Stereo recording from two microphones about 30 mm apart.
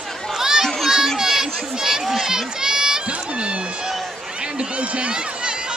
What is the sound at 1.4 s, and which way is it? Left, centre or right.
Speech, centre.